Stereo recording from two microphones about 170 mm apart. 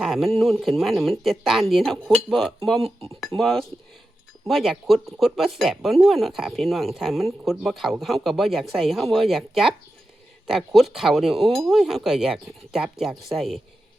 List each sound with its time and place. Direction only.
0.0 s speech: centre (ahead or behind)